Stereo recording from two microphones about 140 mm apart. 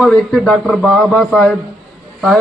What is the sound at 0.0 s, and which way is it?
A man's voice, centre (ahead or behind).